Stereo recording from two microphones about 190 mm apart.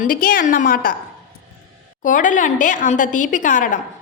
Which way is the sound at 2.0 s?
45° left (ahead or behind).